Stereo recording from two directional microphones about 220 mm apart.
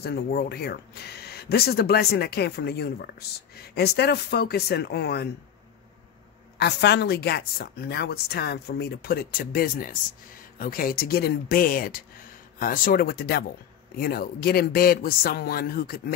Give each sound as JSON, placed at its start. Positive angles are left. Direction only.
{"t": 0.0, "sound": "speech", "side_deg": 45}
{"t": 6.6, "sound": "speech", "side_deg": 50}